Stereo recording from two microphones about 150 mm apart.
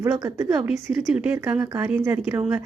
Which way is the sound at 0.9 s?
Centre (ahead or behind).